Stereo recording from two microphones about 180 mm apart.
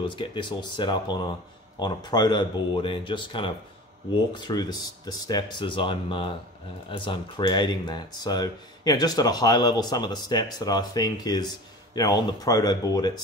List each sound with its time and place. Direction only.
0.0 s speech: 25° left (ahead or behind)